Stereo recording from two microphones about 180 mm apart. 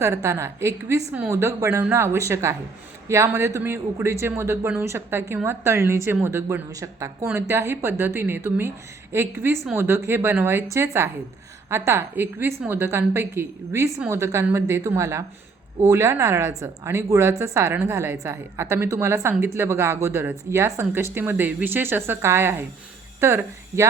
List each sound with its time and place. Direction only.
0.0 s a woman's voice: 15° right (ahead or behind)